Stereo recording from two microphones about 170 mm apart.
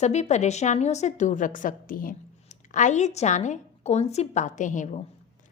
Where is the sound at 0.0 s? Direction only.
40° left (ahead or behind).